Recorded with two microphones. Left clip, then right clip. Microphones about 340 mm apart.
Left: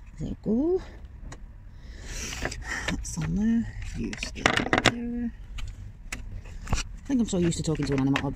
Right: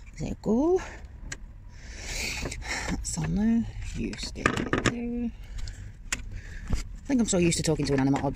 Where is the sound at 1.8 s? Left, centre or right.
Right.